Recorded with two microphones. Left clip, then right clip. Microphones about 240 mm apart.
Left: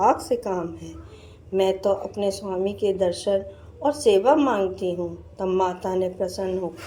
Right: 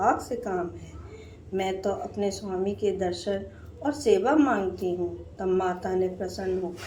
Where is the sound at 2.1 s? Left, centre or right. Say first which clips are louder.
Left 4 dB; left.